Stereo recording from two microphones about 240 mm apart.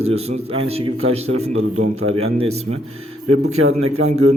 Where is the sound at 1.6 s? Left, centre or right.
Right.